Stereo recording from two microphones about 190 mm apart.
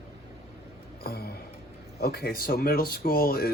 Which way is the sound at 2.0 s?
55° left (ahead or behind).